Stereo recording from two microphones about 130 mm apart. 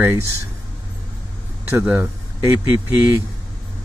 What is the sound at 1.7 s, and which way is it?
Speech, 15° right (ahead or behind).